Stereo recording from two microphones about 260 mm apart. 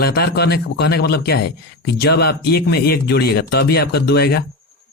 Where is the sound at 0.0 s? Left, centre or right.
Left.